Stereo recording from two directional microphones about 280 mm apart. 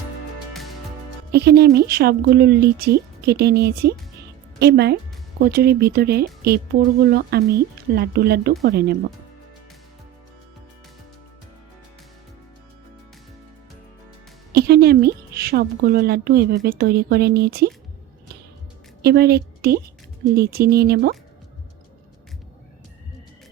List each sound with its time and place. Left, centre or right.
1.3 s a woman's voice: right
14.5 s a woman's voice: right
19.0 s a woman's voice: right